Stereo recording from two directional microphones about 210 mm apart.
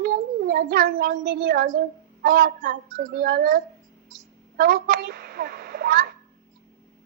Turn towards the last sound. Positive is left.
turn(degrees=-45)  # may be behind; listen again after turning